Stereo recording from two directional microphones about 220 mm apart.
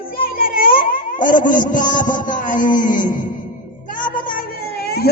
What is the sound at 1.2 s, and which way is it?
A man's voice, 35° left (ahead or behind).